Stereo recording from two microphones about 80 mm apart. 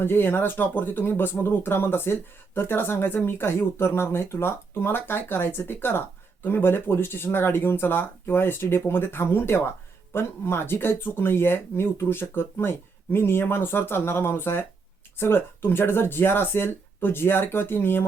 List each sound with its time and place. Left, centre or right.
0.0 s speech: left